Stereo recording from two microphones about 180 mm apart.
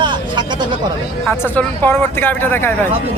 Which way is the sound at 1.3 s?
10° left (ahead or behind).